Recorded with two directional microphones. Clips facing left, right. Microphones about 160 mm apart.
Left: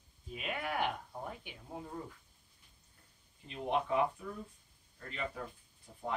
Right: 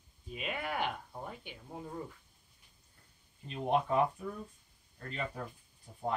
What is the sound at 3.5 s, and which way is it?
Speech, 40° right (ahead or behind).